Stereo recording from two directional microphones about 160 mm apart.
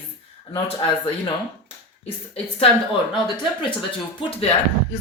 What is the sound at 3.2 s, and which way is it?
Speech, 30° left (ahead or behind).